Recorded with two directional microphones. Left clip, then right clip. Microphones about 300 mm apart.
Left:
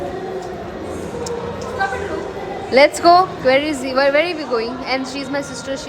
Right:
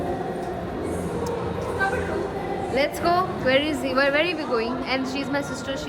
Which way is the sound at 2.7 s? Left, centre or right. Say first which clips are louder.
Left 12 dB; centre.